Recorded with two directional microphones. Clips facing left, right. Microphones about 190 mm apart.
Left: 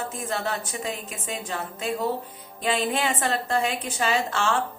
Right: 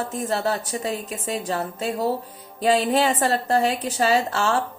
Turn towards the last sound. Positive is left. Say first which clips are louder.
# right 4 dB
turn(degrees=-40)  # may be behind; listen again after turning